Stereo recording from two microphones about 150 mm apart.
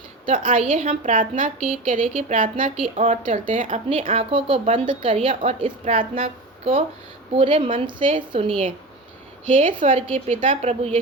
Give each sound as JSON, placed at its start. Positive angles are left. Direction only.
{"t": 0.3, "sound": "a woman's voice", "side_deg": -65}
{"t": 0.5, "sound": "a woman's voice", "side_deg": -50}
{"t": 2.7, "sound": "a woman's voice", "side_deg": -50}
{"t": 3.8, "sound": "speech", "side_deg": -40}
{"t": 5.3, "sound": "a woman's voice", "side_deg": -60}
{"t": 5.8, "sound": "a woman's voice", "side_deg": -40}